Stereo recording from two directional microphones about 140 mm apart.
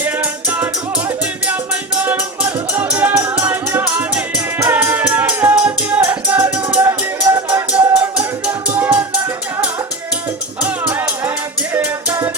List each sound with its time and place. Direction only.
0.0 s music: 10° right (ahead or behind)
10.6 s music: 10° right (ahead or behind)